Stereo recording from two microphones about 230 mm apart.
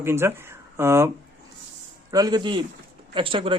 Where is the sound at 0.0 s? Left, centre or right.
Centre.